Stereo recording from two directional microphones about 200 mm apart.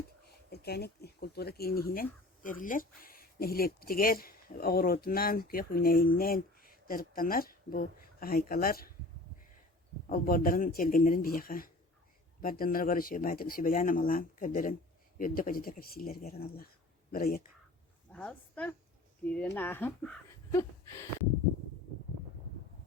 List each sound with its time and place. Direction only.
0.5 s speech: 55° left (ahead or behind)
10.1 s speech: 45° left (ahead or behind)
18.1 s a woman's voice: 5° left (ahead or behind)
20.5 s a sound: 15° left (ahead or behind)